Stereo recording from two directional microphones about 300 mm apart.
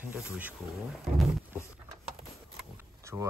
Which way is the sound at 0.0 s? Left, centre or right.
Centre.